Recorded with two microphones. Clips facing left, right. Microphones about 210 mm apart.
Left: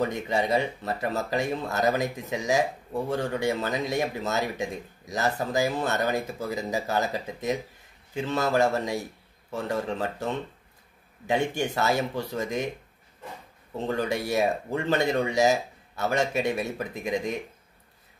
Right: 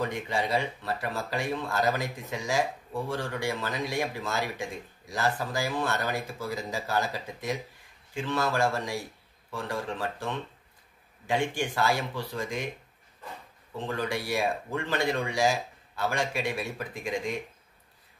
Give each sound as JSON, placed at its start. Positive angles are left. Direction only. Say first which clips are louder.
{"t": 0.0, "sound": "speech", "louder": "left 4 dB", "side_deg": 20}
{"t": 11.2, "sound": "speech", "louder": "left 3 dB", "side_deg": 20}
{"t": 13.8, "sound": "speech", "louder": "left 4 dB", "side_deg": 25}